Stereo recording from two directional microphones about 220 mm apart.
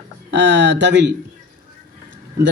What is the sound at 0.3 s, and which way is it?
Speech, 55° right (ahead or behind).